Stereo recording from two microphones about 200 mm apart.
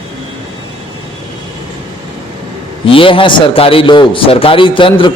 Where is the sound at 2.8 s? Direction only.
25° left (ahead or behind).